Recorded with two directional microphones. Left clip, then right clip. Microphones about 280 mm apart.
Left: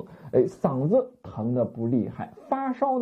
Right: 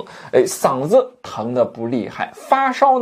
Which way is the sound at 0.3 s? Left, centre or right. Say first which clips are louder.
Right 7 dB; centre.